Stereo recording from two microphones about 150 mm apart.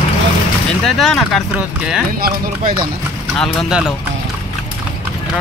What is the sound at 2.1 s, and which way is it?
Speech, 75° right (ahead or behind).